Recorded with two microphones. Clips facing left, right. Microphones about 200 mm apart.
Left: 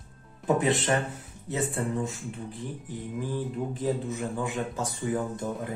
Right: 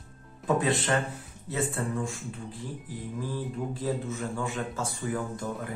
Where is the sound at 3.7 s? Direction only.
20° left (ahead or behind).